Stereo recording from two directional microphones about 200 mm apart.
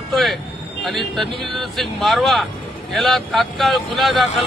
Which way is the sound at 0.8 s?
Centre (ahead or behind).